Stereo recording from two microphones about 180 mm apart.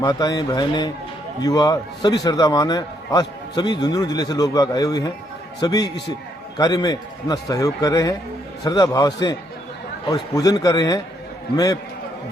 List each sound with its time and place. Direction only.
0.0 s a man's voice: 20° left (ahead or behind)